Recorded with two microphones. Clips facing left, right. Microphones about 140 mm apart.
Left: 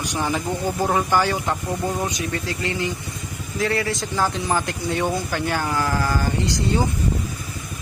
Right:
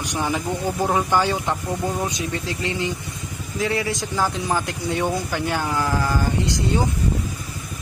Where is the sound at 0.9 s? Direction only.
15° right (ahead or behind).